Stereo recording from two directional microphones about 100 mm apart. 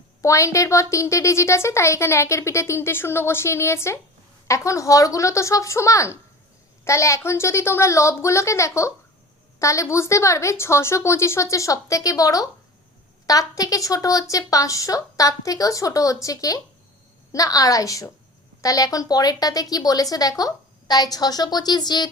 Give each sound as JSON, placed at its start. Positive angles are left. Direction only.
{"t": 0.2, "sound": "a woman's voice", "side_deg": 30}